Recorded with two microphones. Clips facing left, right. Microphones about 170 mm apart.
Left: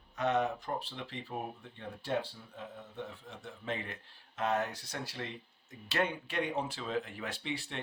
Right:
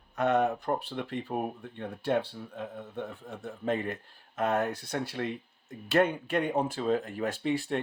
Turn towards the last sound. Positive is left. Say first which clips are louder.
# right 10 dB
turn(degrees=-50)  # may be behind; listen again after turning